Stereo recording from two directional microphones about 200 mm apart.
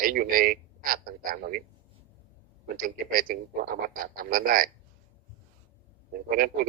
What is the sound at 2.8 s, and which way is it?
Speech, 45° right (ahead or behind).